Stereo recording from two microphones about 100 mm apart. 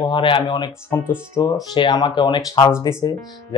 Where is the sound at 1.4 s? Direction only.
40° left (ahead or behind); by 2.7 s 55° left (ahead or behind).